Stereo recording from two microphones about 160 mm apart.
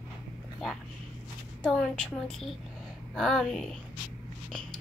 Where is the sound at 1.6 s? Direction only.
5° left (ahead or behind).